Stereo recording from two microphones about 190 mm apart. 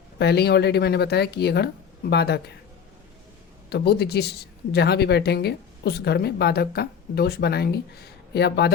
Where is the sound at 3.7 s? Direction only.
60° left (ahead or behind).